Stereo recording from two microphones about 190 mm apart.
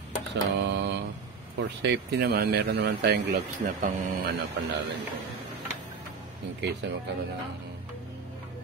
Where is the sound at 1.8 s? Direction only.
60° right (ahead or behind).